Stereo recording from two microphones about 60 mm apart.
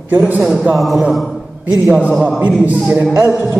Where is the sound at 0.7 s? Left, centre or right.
Centre.